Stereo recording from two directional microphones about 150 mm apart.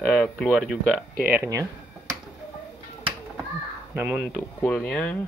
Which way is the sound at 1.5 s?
25° right (ahead or behind).